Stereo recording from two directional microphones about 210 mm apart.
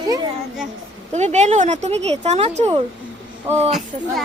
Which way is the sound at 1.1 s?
35° right (ahead or behind).